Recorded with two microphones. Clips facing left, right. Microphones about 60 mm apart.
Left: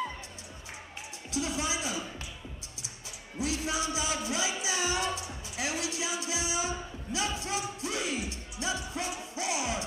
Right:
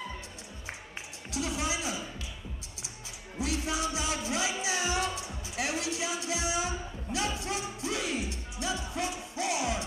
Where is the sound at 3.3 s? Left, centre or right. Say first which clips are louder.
Even; right.